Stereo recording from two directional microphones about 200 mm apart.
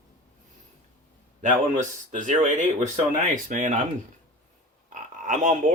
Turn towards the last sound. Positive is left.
turn(degrees=-40)  # may be behind; listen again after turning